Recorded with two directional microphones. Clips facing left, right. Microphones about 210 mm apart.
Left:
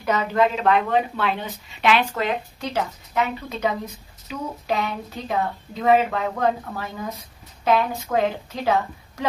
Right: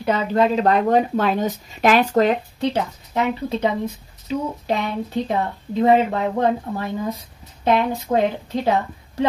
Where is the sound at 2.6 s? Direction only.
30° right (ahead or behind).